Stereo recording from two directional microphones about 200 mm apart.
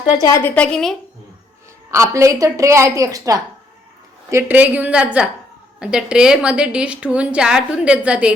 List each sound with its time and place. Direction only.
0.2 s a woman's voice: 15° left (ahead or behind)
1.9 s a woman's voice: 15° right (ahead or behind)